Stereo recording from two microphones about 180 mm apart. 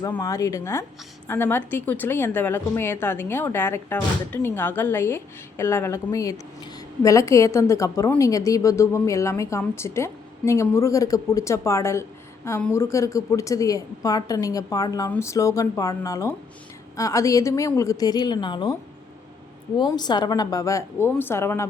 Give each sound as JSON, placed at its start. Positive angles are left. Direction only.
{"t": 0.0, "sound": "a woman's voice", "side_deg": 15}